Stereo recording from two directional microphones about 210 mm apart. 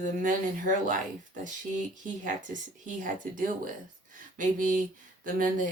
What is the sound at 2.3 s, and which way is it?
Speech, 35° right (ahead or behind).